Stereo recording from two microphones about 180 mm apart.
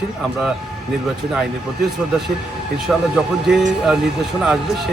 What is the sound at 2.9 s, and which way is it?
Speech, centre (ahead or behind).